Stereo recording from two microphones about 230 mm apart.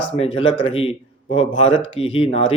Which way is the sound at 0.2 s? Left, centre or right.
Left.